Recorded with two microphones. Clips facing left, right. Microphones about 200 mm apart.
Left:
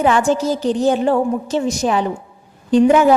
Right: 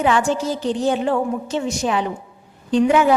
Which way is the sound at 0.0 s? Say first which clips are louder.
Left 3 dB; 40° left (ahead or behind).